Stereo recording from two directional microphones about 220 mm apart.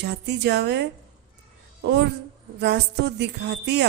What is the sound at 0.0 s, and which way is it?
Speech, 50° right (ahead or behind).